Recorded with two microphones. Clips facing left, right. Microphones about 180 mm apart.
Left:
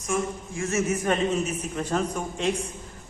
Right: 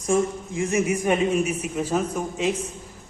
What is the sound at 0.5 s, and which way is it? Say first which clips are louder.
A man's voice: right 3 dB; 15° right (ahead or behind).